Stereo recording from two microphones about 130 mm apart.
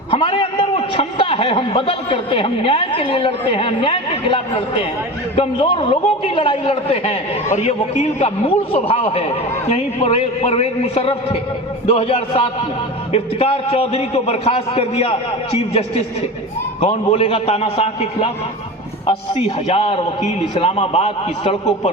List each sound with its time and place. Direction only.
0.1 s a man's voice: 45° left (ahead or behind)
16.8 s a man's voice: 50° left (ahead or behind)